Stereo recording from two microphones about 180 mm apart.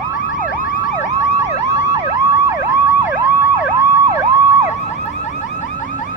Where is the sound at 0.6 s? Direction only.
50° left (ahead or behind).